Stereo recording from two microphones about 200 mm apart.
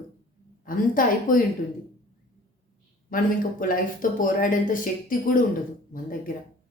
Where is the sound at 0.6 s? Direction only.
45° left (ahead or behind).